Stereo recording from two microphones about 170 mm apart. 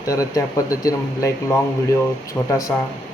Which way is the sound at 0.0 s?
20° left (ahead or behind).